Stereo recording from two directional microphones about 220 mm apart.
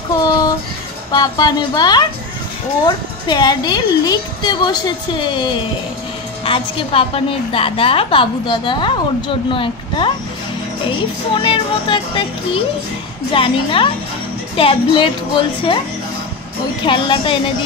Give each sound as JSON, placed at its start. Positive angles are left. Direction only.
{"t": 1.1, "sound": "a woman's voice", "side_deg": 20}
{"t": 16.8, "sound": "speech", "side_deg": 20}